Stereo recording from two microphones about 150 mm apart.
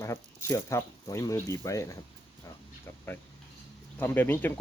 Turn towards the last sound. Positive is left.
turn(degrees=15)  # may be behind; listen again after turning